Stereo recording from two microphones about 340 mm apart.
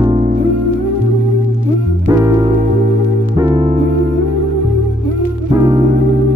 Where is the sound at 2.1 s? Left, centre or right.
Centre.